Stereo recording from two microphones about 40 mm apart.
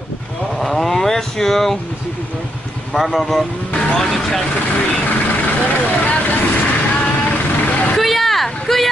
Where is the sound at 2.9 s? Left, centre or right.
Centre.